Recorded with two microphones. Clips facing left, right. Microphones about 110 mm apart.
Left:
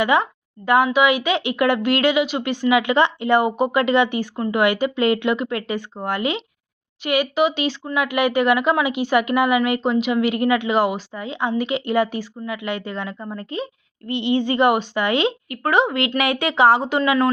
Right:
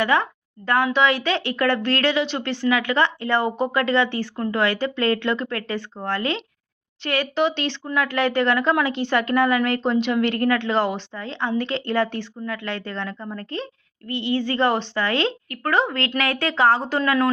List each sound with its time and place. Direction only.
0.0 s speech: 15° left (ahead or behind)
16.8 s speech: centre (ahead or behind)